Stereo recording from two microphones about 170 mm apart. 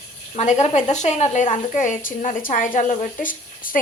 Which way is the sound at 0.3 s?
40° left (ahead or behind).